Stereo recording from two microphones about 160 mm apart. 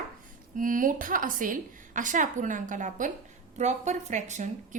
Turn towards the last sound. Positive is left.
turn(degrees=-50)  # may be behind; listen again after turning